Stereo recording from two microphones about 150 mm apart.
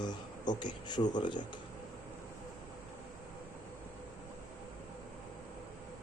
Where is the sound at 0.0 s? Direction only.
30° left (ahead or behind).